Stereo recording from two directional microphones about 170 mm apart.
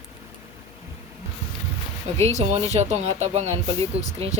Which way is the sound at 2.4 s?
40° right (ahead or behind).